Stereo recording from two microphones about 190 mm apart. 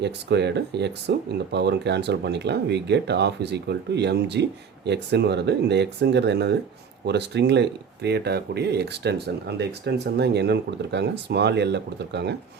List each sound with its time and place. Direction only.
0.0 s speech: 65° right (ahead or behind)